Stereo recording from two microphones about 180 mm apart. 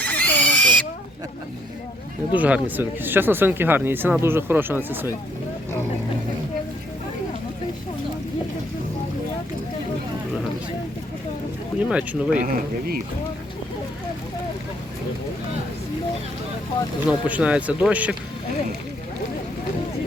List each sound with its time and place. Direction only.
0.0 s pig: 10° left (ahead or behind)
2.3 s speech: 10° right (ahead or behind)
11.8 s speech: 5° right (ahead or behind)
12.4 s speech: 50° right (ahead or behind)
17.1 s speech: 5° right (ahead or behind)